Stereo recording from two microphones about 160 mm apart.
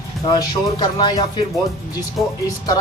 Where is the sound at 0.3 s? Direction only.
25° left (ahead or behind).